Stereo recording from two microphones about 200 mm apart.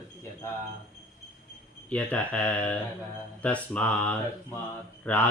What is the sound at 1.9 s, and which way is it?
Speech, 5° left (ahead or behind).